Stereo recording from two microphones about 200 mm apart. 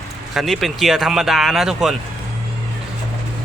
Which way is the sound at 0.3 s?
Centre (ahead or behind).